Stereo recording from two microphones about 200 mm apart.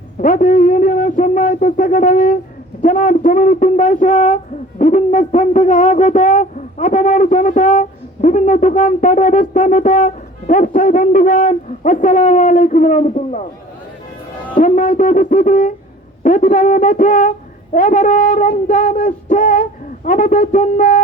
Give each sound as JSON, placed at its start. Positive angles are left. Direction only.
{"t": 0.2, "sound": "owl", "side_deg": 40}
{"t": 14.5, "sound": "owl", "side_deg": 40}